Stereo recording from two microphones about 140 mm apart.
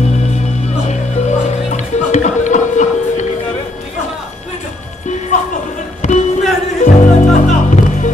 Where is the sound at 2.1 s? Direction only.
60° left (ahead or behind).